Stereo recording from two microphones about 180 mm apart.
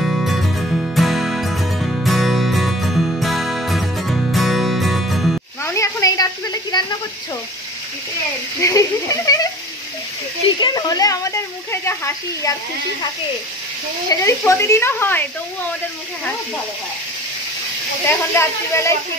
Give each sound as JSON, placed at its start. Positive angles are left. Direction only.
{"t": 0.0, "sound": "music", "side_deg": 0}
{"t": 5.6, "sound": "a sound", "side_deg": 15}
{"t": 8.5, "sound": "speech", "side_deg": 15}
{"t": 10.6, "sound": "speech", "side_deg": 20}
{"t": 14.0, "sound": "speech", "side_deg": 20}
{"t": 18.3, "sound": "speech", "side_deg": 15}